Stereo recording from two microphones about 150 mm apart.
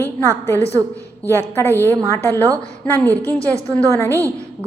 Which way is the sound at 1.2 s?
15° left (ahead or behind).